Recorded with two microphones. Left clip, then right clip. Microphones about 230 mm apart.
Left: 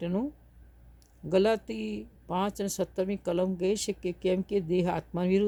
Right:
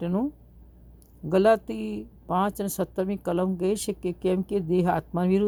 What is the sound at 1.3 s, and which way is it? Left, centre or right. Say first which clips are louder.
Speech: right 5 dB; centre.